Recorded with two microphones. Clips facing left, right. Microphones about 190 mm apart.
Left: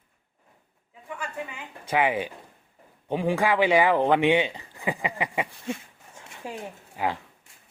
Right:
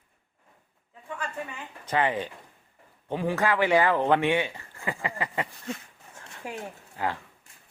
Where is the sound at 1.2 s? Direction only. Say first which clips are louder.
Even; 10° left (ahead or behind).